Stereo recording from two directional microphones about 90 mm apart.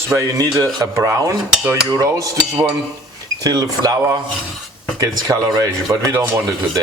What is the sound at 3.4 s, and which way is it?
Speech, 45° right (ahead or behind).